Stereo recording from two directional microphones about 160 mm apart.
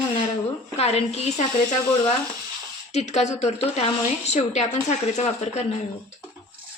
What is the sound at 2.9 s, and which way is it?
Speech, 45° left (ahead or behind).